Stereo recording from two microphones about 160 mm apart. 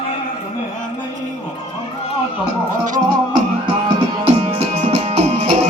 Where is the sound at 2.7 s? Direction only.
55° right (ahead or behind).